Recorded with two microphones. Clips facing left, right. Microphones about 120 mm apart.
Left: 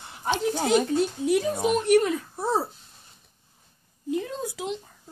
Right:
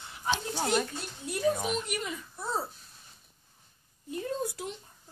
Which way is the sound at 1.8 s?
75° left (ahead or behind).